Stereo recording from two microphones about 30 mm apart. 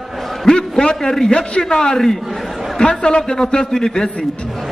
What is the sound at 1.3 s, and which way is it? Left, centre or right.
Speech, left.